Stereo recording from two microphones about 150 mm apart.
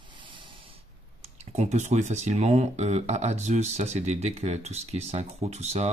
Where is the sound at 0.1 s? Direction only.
35° right (ahead or behind).